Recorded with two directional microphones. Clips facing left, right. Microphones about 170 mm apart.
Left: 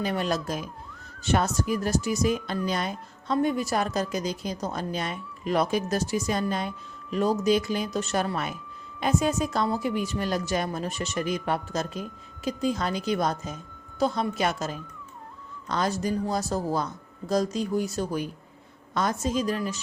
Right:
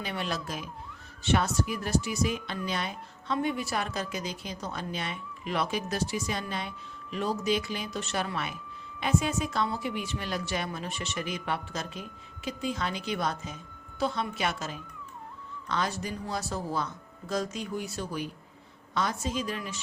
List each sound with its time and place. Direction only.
0.0 s speech: 40° left (ahead or behind)